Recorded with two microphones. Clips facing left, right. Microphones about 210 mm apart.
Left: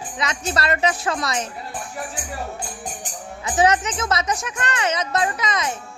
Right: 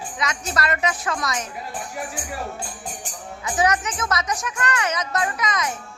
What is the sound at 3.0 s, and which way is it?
Speech, 25° left (ahead or behind).